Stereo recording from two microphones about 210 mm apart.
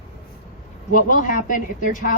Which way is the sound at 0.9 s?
40° left (ahead or behind).